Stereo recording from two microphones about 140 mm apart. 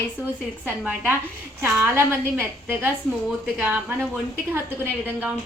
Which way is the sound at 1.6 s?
15° right (ahead or behind).